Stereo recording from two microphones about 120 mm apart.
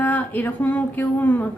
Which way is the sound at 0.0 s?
15° left (ahead or behind).